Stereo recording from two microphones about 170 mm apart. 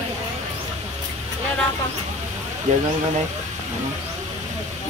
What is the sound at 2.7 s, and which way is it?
Speech, 45° right (ahead or behind).